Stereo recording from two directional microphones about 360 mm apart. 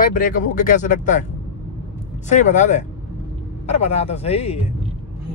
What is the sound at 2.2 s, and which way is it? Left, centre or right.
Speech, centre.